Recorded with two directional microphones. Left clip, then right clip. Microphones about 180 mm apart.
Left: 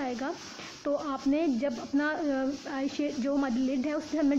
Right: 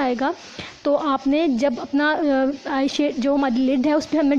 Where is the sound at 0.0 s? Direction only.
40° right (ahead or behind).